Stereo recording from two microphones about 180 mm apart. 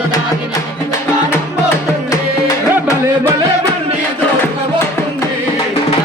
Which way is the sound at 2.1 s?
20° left (ahead or behind).